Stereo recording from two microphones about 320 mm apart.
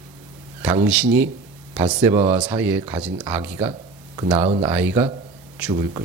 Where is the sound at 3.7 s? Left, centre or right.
Centre.